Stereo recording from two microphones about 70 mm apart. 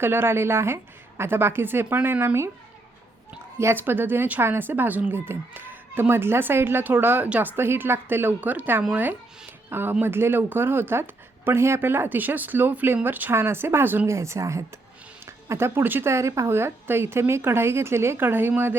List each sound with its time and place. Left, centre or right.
0.0 s speech: right
2.2 s speech: right
3.6 s speech: right
14.1 s speech: right